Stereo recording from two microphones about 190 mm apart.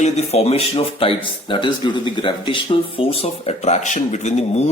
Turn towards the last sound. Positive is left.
turn(degrees=35)  # may be behind; listen again after turning